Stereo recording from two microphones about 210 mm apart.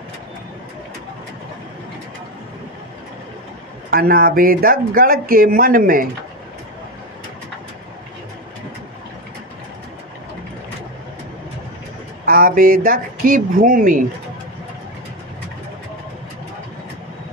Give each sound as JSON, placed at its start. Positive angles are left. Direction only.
{"t": 3.9, "sound": "speech", "side_deg": -45}
{"t": 12.3, "sound": "speech", "side_deg": -40}